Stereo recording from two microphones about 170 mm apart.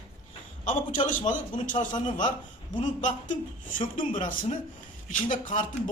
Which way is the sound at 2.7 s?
45° left (ahead or behind).